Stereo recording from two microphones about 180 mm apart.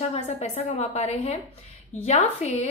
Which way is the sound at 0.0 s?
35° left (ahead or behind).